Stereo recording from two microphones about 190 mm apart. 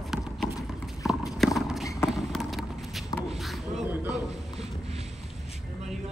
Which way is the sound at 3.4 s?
Centre (ahead or behind).